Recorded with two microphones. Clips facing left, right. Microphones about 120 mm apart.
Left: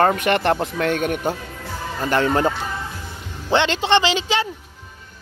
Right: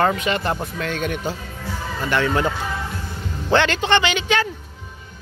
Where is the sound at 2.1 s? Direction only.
35° left (ahead or behind).